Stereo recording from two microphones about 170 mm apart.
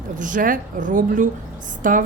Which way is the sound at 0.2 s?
50° right (ahead or behind).